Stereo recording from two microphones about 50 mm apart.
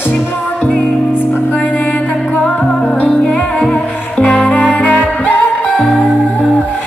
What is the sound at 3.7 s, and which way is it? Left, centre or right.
Music, centre.